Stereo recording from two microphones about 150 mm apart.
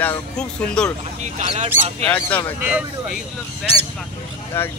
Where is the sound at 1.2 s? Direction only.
50° right (ahead or behind).